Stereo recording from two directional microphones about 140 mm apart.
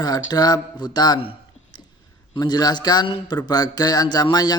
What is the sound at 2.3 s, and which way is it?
A man's voice, 30° left (ahead or behind).